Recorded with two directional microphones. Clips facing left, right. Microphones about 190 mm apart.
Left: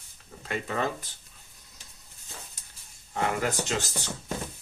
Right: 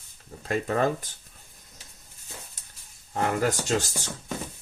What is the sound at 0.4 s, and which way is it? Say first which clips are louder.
Speech: right 5 dB; 45° right (ahead or behind).